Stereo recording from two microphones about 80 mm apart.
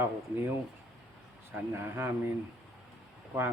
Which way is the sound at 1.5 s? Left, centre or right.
Right.